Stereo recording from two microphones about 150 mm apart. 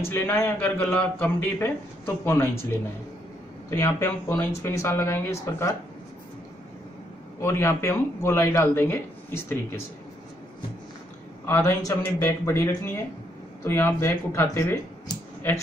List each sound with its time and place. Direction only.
0.1 s speech: 15° left (ahead or behind)
3.7 s speech: 15° left (ahead or behind)
7.4 s speech: 15° left (ahead or behind)
11.4 s speech: 20° left (ahead or behind)